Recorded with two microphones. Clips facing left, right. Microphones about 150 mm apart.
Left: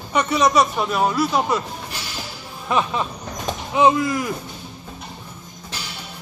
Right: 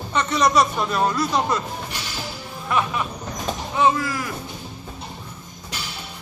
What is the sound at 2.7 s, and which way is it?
Speech, 20° left (ahead or behind).